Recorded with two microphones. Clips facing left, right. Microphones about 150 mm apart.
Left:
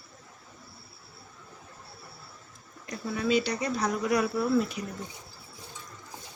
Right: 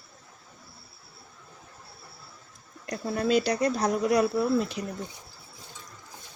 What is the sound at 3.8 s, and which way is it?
Speech, 30° right (ahead or behind).